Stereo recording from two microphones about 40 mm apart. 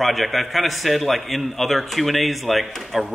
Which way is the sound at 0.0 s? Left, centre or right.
Centre.